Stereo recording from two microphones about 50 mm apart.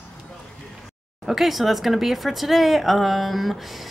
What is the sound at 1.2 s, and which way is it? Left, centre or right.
Speech, centre.